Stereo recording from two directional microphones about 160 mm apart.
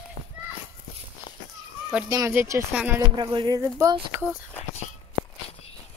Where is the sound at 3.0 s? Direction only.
25° right (ahead or behind).